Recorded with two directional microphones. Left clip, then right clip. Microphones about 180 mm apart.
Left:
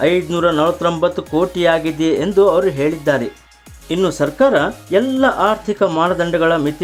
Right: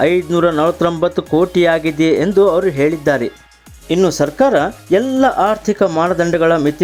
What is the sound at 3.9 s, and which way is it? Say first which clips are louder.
Speech: right 3 dB; 15° right (ahead or behind).